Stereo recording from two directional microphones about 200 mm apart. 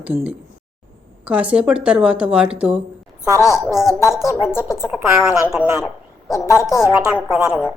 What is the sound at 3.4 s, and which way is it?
A woman's voice, 15° left (ahead or behind).